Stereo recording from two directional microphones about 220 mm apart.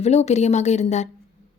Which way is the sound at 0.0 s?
30° left (ahead or behind).